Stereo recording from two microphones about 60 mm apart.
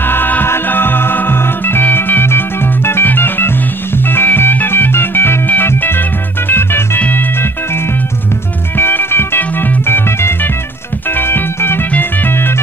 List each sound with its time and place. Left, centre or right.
0.0 s music: left
4.1 s organ: left
7.0 s music: left